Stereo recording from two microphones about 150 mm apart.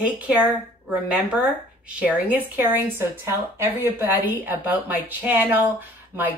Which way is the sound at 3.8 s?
10° right (ahead or behind).